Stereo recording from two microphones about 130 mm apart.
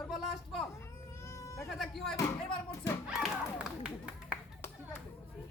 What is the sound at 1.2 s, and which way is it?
Sheep, 20° left (ahead or behind).